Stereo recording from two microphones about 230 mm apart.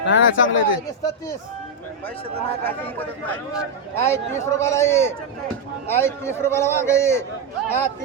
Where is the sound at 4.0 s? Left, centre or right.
Centre.